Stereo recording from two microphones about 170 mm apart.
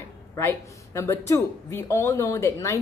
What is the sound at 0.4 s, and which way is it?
A woman's voice, 15° left (ahead or behind).